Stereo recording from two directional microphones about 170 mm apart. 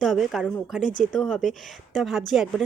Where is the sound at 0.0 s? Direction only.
Centre (ahead or behind).